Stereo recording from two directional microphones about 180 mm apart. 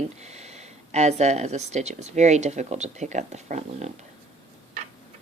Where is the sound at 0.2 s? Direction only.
35° right (ahead or behind).